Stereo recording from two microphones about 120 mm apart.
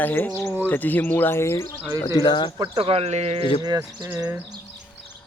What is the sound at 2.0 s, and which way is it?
Speech, 35° left (ahead or behind).